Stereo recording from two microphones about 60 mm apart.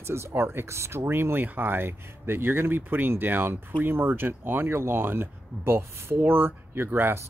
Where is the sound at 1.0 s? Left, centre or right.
Right.